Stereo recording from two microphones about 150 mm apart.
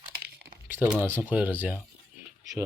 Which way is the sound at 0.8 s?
10° right (ahead or behind).